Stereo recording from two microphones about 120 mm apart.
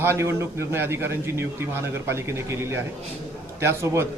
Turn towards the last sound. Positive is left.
turn(degrees=-25)  # may be behind; listen again after turning